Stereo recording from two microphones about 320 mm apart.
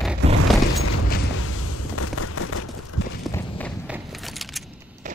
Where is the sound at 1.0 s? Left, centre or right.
Left.